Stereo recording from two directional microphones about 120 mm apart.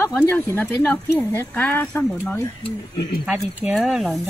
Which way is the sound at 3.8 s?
Centre (ahead or behind).